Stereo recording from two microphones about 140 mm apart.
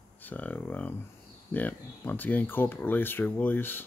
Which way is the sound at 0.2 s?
15° left (ahead or behind).